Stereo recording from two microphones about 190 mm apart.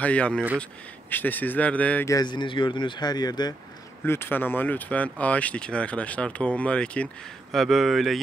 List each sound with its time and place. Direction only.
0.0 s speech: 5° left (ahead or behind)
4.0 s speech: 10° left (ahead or behind)